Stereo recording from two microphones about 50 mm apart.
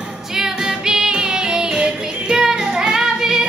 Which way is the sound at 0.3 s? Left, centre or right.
Centre.